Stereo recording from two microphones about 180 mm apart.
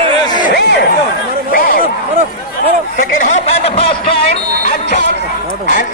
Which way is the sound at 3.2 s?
40° left (ahead or behind).